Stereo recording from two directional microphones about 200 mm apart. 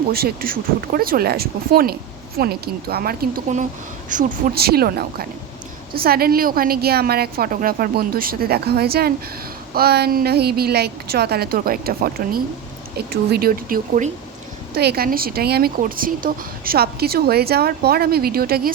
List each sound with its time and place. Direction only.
0.1 s speech: 50° right (ahead or behind)